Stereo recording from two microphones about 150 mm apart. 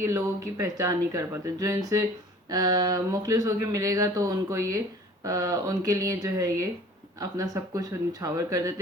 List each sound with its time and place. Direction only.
0.0 s speech: 20° right (ahead or behind)